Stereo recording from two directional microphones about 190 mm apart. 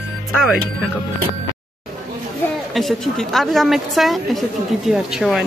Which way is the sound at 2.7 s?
Centre (ahead or behind).